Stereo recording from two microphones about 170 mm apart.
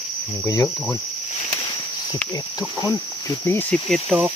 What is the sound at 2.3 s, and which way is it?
Speech, 20° left (ahead or behind).